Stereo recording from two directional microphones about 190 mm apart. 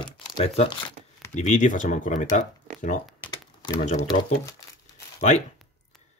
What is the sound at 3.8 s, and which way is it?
Speech, 40° left (ahead or behind).